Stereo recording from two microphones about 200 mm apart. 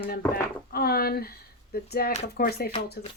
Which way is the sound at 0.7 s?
50° left (ahead or behind).